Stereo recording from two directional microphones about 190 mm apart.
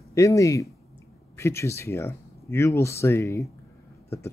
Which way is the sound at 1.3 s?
15° left (ahead or behind).